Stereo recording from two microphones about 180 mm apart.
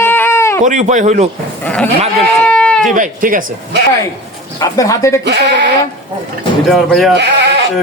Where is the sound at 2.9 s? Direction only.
50° right (ahead or behind).